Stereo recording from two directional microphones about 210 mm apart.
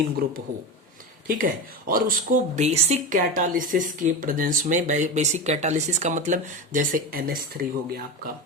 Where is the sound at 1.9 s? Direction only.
40° right (ahead or behind).